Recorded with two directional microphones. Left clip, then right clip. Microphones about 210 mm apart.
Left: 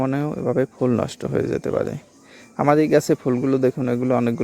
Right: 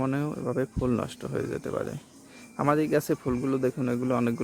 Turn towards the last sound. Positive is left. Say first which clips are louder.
# left 7 dB
turn(degrees=25)  # may be behind; listen again after turning